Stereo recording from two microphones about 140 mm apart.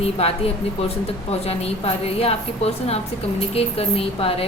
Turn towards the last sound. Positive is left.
turn(degrees=45)  # may be behind; listen again after turning